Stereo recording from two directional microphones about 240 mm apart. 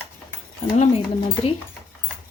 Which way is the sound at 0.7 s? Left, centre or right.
Left.